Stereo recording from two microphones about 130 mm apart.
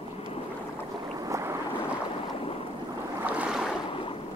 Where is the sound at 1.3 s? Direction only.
20° right (ahead or behind).